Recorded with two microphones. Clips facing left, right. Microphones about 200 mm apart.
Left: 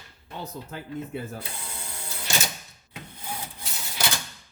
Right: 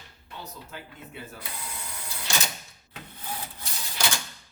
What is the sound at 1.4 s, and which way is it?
Ratchet, 25° left (ahead or behind).